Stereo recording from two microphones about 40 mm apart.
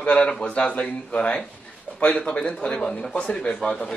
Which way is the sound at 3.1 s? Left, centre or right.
Left.